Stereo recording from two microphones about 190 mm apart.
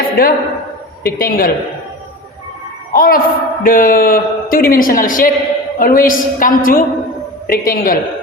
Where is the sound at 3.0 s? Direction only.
50° left (ahead or behind).